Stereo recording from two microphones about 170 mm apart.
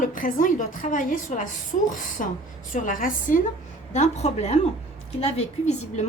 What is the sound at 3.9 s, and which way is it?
Speech, 40° left (ahead or behind).